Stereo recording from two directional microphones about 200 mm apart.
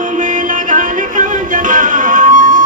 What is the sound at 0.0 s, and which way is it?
Music, 40° right (ahead or behind).